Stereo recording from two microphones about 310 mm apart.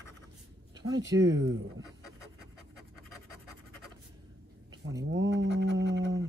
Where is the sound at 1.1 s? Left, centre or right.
Right.